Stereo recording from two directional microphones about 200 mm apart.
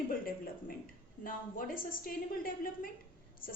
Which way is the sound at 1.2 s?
45° left (ahead or behind).